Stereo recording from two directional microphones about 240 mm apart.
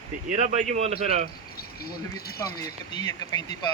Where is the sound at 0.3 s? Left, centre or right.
Right.